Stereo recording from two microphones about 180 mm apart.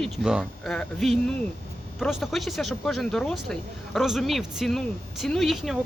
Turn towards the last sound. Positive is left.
turn(degrees=0)  # may be behind; listen again after turning